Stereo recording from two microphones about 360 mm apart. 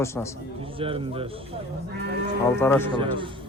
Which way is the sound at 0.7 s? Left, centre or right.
Centre.